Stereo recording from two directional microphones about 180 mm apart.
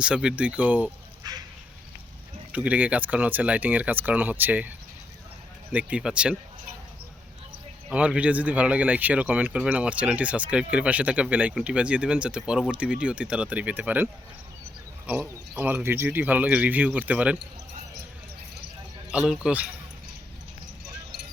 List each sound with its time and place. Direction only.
0.0 s speech: 5° right (ahead or behind)
1.2 s duck: 20° right (ahead or behind)
2.5 s speech: 5° right (ahead or behind)
5.7 s speech: 5° right (ahead or behind)
7.9 s speech: 5° right (ahead or behind)
19.1 s speech: 5° right (ahead or behind)